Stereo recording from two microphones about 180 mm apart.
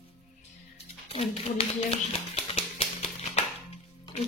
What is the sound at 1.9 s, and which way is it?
Music, 35° left (ahead or behind).